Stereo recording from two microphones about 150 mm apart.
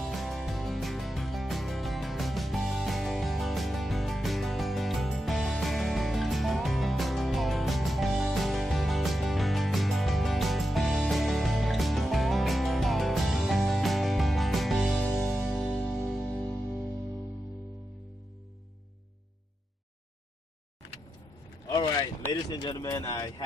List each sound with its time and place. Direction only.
0.0 s music: centre (ahead or behind)
21.7 s boat: 30° left (ahead or behind)
22.3 s speech: 25° left (ahead or behind)